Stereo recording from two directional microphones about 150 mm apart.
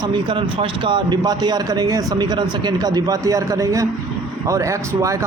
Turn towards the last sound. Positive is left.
turn(degrees=-20)  # may be behind; listen again after turning